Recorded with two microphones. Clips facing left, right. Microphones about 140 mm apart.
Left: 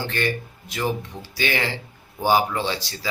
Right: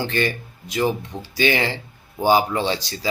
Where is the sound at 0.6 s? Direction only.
20° right (ahead or behind).